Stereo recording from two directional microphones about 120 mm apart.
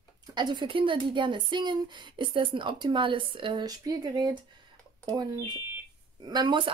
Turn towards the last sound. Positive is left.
turn(degrees=-40)  # may be behind; listen again after turning